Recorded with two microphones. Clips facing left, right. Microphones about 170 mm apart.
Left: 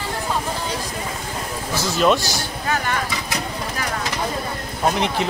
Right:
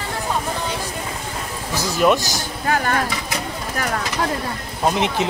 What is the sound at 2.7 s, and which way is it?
Vehicle, 45° right (ahead or behind).